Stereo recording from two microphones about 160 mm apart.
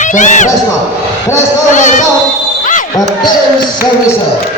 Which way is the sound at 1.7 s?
50° left (ahead or behind).